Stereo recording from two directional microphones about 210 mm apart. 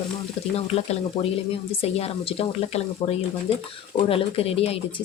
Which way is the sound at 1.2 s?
25° left (ahead or behind).